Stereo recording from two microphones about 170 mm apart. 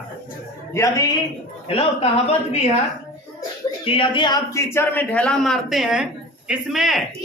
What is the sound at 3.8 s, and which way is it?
A man's voice, 30° left (ahead or behind).